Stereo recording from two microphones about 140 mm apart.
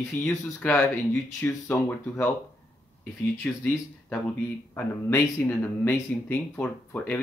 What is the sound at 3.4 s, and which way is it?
Speech, 10° left (ahead or behind).